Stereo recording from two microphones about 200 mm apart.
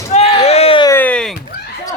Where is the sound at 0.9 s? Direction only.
10° left (ahead or behind).